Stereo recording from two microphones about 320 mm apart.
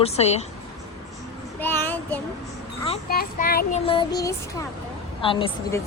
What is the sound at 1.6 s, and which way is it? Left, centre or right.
Child singing, centre.